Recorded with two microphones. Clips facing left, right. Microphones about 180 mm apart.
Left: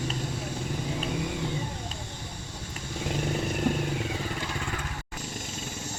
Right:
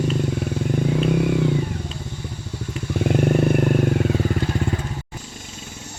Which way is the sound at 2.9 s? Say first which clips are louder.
Right 11 dB; 60° right (ahead or behind).